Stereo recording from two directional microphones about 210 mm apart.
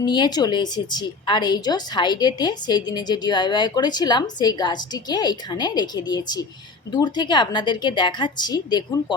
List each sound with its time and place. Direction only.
0.0 s a woman's voice: 20° left (ahead or behind)